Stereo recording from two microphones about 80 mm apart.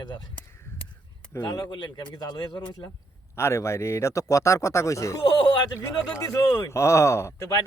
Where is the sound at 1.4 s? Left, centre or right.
Left.